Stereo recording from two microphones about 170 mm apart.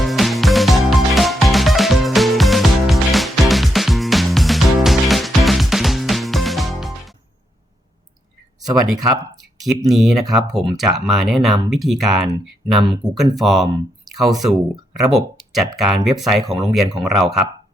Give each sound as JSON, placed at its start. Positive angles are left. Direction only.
{"t": 0.0, "sound": "music", "side_deg": 0}
{"t": 8.6, "sound": "speech", "side_deg": -20}
{"t": 9.9, "sound": "speech", "side_deg": 0}